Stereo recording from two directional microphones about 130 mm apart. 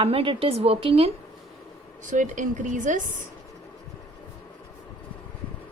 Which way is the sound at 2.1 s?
75° right (ahead or behind).